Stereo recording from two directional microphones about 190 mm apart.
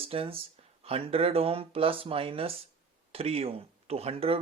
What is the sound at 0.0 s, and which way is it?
Speech, 30° right (ahead or behind).